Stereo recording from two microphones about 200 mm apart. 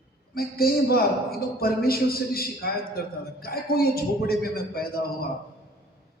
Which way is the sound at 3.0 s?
50° left (ahead or behind).